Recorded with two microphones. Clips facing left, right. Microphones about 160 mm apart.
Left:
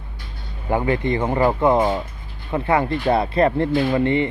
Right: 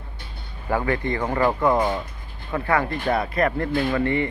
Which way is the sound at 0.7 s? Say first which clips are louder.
Left 3 dB; 20° left (ahead or behind).